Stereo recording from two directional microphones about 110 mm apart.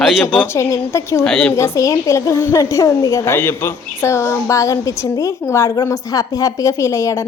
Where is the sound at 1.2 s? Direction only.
5° left (ahead or behind).